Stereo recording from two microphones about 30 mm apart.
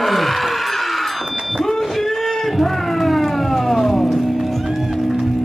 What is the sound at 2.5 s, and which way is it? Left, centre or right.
Music, centre.